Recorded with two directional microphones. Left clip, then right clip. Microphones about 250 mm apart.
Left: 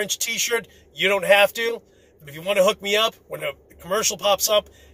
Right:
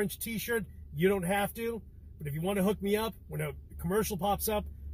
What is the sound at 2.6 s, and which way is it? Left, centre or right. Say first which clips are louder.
Speech: left 15 dB; centre.